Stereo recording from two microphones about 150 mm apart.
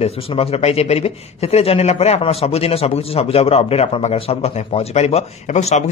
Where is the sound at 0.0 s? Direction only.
40° left (ahead or behind).